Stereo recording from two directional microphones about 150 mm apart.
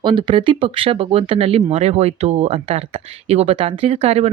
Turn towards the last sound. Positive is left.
turn(degrees=-45)  # may be behind; listen again after turning